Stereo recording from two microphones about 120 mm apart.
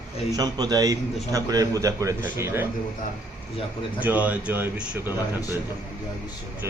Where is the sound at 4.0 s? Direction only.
15° right (ahead or behind).